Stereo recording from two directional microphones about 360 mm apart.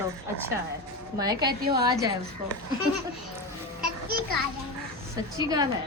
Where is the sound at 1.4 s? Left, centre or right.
Right.